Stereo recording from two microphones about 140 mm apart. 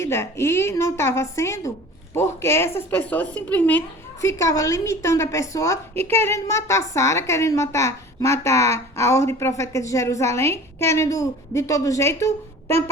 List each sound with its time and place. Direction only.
0.0 s a woman's voice: 20° left (ahead or behind)
4.2 s a woman's voice: 20° left (ahead or behind)